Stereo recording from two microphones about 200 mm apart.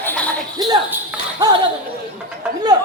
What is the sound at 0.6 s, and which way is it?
Speech, 20° right (ahead or behind).